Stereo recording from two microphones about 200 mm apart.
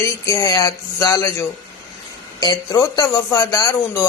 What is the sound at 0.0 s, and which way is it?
A man's voice, 15° left (ahead or behind).